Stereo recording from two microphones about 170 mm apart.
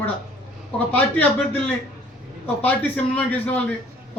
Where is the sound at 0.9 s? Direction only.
10° left (ahead or behind).